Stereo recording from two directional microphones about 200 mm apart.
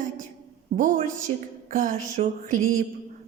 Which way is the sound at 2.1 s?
40° right (ahead or behind).